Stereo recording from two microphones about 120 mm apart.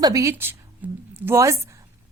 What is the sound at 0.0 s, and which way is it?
A woman's voice, 30° right (ahead or behind).